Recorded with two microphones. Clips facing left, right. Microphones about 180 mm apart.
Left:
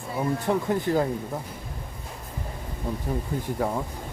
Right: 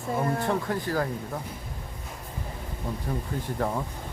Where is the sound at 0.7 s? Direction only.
20° left (ahead or behind).